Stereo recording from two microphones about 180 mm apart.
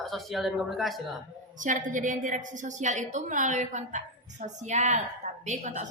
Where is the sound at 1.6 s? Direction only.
45° right (ahead or behind).